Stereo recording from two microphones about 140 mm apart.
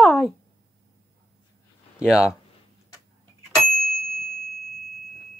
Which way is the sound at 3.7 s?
Centre (ahead or behind).